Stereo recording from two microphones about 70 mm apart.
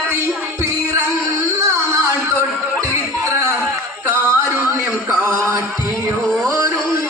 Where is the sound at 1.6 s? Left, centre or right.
Right.